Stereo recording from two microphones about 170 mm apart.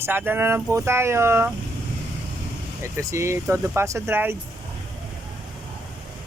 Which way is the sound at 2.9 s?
15° right (ahead or behind).